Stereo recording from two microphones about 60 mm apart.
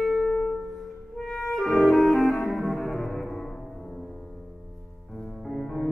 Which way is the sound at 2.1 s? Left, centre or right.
Centre.